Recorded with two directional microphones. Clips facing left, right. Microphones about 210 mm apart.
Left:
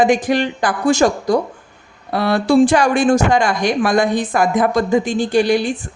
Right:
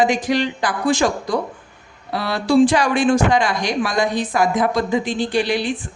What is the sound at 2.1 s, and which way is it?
A woman's voice, 55° left (ahead or behind).